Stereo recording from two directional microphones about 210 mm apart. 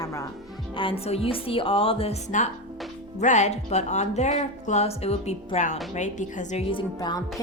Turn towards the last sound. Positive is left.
turn(degrees=20)  # may be behind; listen again after turning